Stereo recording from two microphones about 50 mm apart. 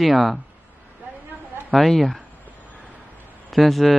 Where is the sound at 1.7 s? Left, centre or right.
Centre.